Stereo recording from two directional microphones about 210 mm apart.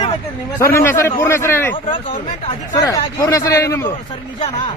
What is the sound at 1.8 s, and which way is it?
Speech, 25° left (ahead or behind).